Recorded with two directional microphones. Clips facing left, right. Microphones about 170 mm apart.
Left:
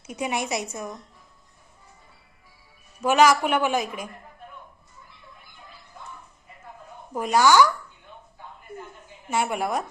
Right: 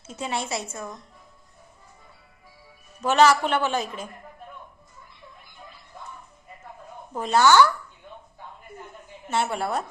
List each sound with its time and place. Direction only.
0.1 s a woman's voice: 15° left (ahead or behind)
3.0 s a woman's voice: 10° left (ahead or behind)
7.1 s a woman's voice: 10° left (ahead or behind)
9.3 s a woman's voice: 10° left (ahead or behind)